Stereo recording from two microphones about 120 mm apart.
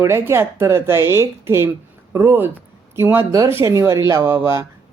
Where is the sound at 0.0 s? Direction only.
20° right (ahead or behind).